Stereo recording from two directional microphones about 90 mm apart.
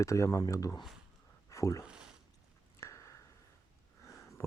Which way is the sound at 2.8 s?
35° left (ahead or behind).